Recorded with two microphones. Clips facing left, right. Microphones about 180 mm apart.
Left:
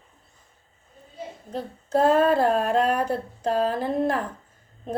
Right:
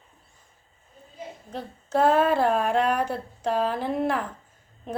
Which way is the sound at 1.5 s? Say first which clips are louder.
Left 3 dB; 35° left (ahead or behind).